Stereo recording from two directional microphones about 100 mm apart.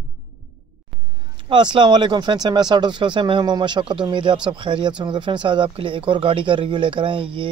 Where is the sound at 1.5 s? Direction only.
50° right (ahead or behind).